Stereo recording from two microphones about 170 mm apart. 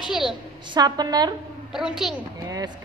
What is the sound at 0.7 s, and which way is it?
Music, 25° right (ahead or behind).